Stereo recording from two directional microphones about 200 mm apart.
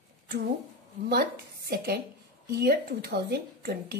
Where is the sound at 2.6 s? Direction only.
50° right (ahead or behind).